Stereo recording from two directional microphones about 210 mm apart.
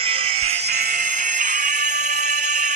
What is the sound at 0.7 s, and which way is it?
Music, 45° right (ahead or behind).